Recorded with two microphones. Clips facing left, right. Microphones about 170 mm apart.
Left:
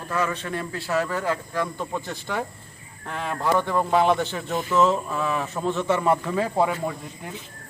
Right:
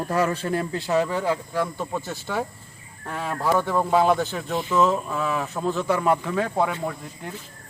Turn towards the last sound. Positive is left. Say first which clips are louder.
# even
turn(degrees=5)  # may be behind; listen again after turning